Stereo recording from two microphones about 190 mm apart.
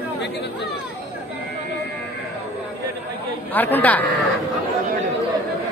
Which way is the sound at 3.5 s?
10° left (ahead or behind).